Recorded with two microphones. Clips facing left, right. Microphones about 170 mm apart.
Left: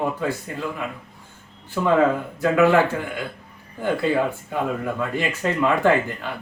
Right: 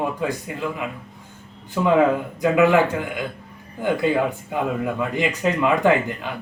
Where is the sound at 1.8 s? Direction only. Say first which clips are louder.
Right 1 dB; 15° right (ahead or behind).